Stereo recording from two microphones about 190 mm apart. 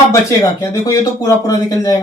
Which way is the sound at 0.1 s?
15° left (ahead or behind).